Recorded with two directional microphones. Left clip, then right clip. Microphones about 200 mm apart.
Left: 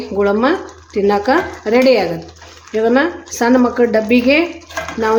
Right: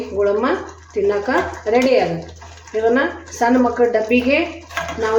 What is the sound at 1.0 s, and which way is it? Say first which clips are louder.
Speech: left 4 dB; 50° left (ahead or behind).